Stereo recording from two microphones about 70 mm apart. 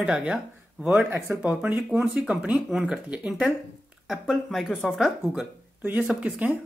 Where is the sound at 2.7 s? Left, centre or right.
Centre.